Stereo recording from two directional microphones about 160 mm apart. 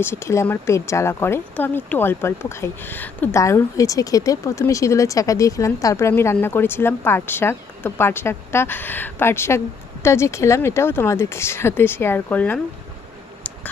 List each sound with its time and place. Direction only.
0.0 s speech: 15° left (ahead or behind)